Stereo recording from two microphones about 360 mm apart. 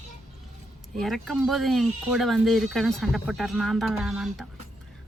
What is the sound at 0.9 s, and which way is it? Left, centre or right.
Speech, centre.